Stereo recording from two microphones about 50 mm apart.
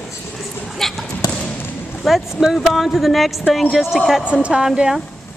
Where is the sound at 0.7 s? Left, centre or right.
Centre.